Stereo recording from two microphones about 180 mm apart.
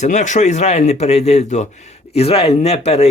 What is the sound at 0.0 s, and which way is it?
Speech, 40° left (ahead or behind).